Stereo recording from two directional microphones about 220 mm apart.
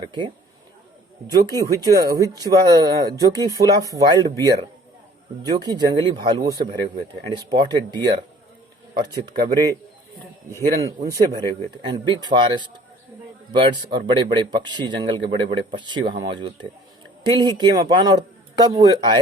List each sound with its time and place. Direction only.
1.3 s speech: 15° right (ahead or behind)
11.3 s speech: 20° right (ahead or behind)